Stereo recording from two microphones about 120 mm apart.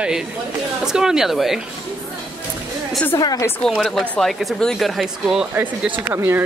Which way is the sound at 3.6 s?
Centre (ahead or behind).